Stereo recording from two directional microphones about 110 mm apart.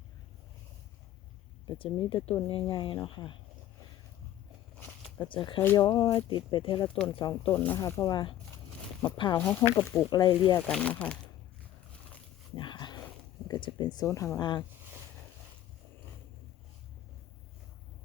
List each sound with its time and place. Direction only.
1.8 s speech: 50° left (ahead or behind)
5.2 s speech: 50° left (ahead or behind)
5.7 s speech: 35° left (ahead or behind)
6.1 s speech: 50° left (ahead or behind)
7.5 s speech: 15° left (ahead or behind)
8.0 s speech: 45° left (ahead or behind)
9.4 s speech: 15° left (ahead or behind)
10.1 s speech: 45° left (ahead or behind)
10.6 s speech: 10° left (ahead or behind)
12.5 s a sound: 45° left (ahead or behind)
13.5 s speech: 45° left (ahead or behind)
14.1 s speech: 30° left (ahead or behind)